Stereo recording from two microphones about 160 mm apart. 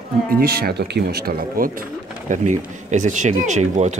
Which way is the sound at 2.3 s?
50° right (ahead or behind).